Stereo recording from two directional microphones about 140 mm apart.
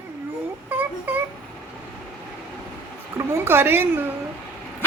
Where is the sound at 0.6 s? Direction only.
10° right (ahead or behind).